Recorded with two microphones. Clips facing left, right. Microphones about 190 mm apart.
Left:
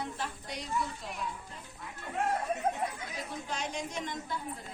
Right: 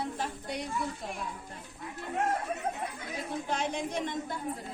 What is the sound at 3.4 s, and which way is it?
Speech, 55° right (ahead or behind).